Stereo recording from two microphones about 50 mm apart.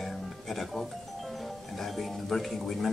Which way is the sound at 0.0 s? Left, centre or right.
Centre.